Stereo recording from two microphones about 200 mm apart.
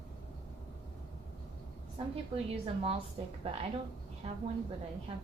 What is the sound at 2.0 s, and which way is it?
Speech, 30° right (ahead or behind).